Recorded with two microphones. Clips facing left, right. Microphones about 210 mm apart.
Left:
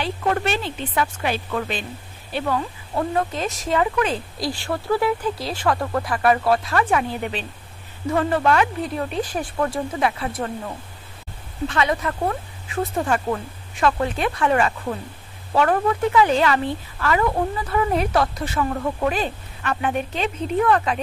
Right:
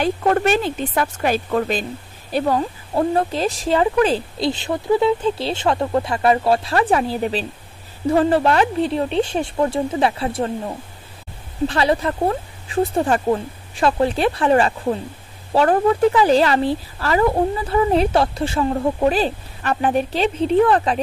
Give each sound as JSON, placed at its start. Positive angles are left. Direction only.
{"t": 0.0, "sound": "a woman's voice", "side_deg": -45}